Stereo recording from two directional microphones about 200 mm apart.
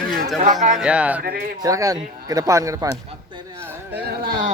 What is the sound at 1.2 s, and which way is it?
Speech, 50° right (ahead or behind).